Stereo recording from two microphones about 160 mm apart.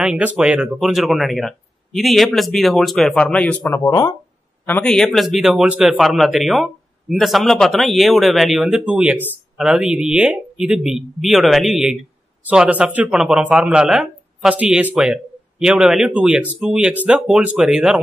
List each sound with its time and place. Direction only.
0.0 s speech: 5° right (ahead or behind)
3.8 s speech: 20° left (ahead or behind)
4.6 s speech: 10° left (ahead or behind)